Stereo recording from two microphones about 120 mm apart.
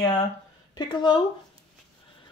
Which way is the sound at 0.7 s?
40° left (ahead or behind).